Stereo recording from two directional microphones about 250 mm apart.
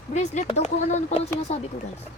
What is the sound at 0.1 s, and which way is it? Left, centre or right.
A woman's voice, left.